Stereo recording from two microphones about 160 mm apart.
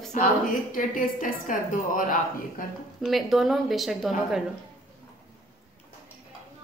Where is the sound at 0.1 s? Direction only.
55° left (ahead or behind).